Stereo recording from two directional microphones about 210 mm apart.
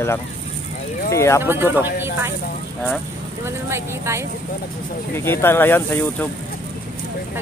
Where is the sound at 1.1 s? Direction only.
15° left (ahead or behind).